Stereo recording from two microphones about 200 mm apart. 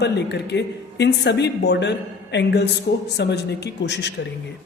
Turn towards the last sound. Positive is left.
turn(degrees=60)  # may be behind; listen again after turning